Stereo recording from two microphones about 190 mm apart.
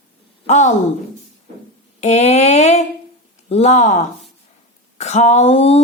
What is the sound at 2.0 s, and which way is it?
Speech, 35° left (ahead or behind).